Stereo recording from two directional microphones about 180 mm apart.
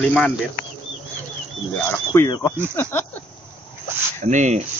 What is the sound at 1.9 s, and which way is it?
Speech, 20° left (ahead or behind).